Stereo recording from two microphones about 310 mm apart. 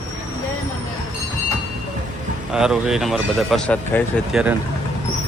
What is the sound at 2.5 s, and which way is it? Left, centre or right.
Speech, centre.